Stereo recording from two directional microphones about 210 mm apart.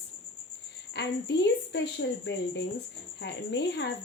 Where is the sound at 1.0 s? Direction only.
55° left (ahead or behind).